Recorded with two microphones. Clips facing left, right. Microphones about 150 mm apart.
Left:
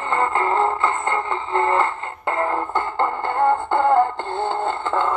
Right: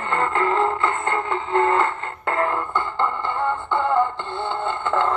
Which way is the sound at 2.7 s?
45° left (ahead or behind).